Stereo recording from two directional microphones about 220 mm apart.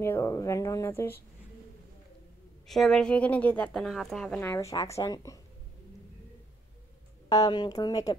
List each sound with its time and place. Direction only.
0.0 s a woman's voice: 15° left (ahead or behind)
2.7 s a woman's voice: centre (ahead or behind)
7.2 s a woman's voice: 20° left (ahead or behind)